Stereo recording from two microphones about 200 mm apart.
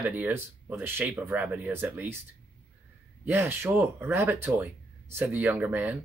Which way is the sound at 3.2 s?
10° right (ahead or behind).